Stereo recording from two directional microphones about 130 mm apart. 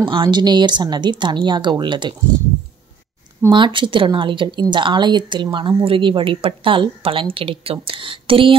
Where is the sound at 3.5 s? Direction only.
40° right (ahead or behind).